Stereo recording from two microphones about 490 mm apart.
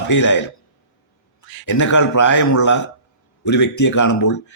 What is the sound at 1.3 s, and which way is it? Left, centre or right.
Speech, left.